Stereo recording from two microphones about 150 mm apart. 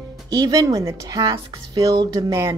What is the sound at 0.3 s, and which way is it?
A woman's voice, 25° right (ahead or behind).